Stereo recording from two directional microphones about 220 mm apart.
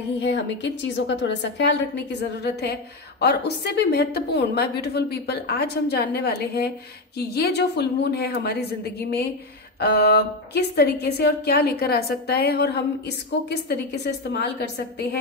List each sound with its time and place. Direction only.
0.2 s a woman's voice: 55° left (ahead or behind)